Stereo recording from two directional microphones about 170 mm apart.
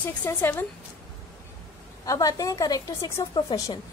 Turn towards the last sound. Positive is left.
turn(degrees=25)  # may be behind; listen again after turning